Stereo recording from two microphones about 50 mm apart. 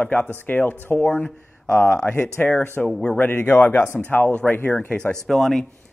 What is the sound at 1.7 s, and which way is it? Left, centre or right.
Speech, left.